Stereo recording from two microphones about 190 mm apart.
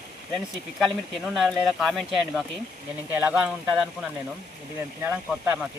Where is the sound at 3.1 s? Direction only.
10° right (ahead or behind).